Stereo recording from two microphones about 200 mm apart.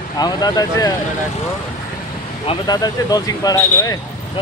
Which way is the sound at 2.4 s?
20° left (ahead or behind).